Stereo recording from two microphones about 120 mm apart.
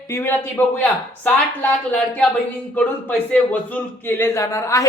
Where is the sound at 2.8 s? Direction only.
15° left (ahead or behind).